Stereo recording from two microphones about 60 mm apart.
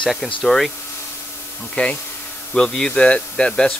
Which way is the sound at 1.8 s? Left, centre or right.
Left.